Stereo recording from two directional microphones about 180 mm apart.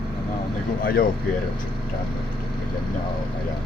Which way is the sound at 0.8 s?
55° left (ahead or behind).